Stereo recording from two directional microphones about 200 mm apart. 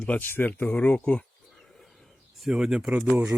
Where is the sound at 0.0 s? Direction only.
10° left (ahead or behind).